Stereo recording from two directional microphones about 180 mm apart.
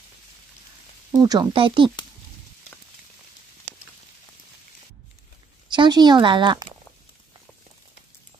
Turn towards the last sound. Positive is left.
turn(degrees=-25)  # may be behind; listen again after turning